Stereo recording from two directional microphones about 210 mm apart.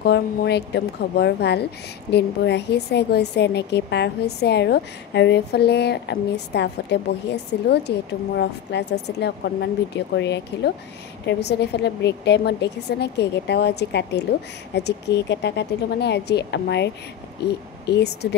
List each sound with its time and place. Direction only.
0.0 s a woman's voice: 50° left (ahead or behind)